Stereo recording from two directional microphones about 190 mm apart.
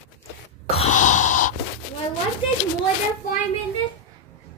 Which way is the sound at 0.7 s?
40° left (ahead or behind).